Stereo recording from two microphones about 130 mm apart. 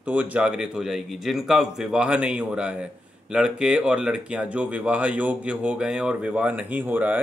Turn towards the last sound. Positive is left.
turn(degrees=-15)  # may be behind; listen again after turning